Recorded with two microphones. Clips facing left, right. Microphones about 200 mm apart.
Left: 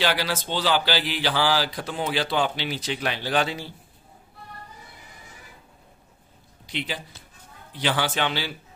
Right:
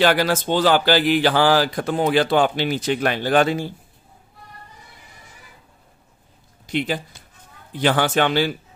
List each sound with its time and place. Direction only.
0.0 s a man's voice: 50° right (ahead or behind)
6.6 s a man's voice: 50° right (ahead or behind)